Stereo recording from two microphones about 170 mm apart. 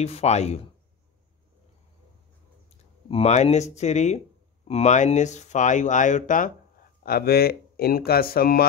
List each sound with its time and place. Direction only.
0.0 s speech: 40° left (ahead or behind)
3.1 s speech: 40° left (ahead or behind)
7.0 s speech: 65° left (ahead or behind)